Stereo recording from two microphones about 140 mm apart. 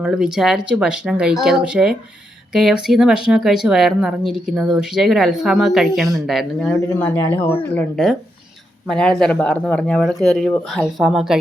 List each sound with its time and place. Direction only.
0.0 s speech: 5° right (ahead or behind)